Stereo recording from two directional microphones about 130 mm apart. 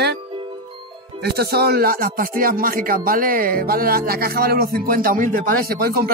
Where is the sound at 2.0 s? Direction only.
90° right.